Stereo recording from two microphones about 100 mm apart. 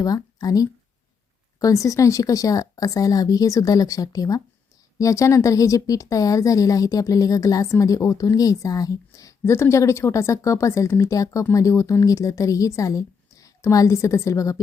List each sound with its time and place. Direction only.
0.3 s a woman's voice: 40° left (ahead or behind)